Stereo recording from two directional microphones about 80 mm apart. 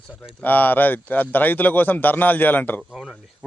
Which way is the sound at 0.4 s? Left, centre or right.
Left.